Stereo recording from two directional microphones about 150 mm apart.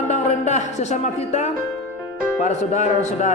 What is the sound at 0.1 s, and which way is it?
Speech, 50° left (ahead or behind).